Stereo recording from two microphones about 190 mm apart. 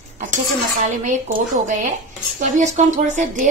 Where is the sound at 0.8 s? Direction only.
40° right (ahead or behind).